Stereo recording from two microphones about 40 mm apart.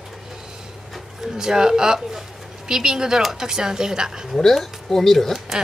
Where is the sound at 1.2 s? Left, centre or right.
Centre.